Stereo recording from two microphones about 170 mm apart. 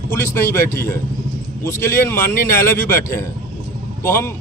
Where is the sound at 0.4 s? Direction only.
15° left (ahead or behind).